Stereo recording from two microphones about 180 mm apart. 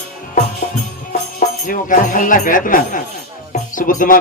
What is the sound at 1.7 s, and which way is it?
Music, 50° left (ahead or behind).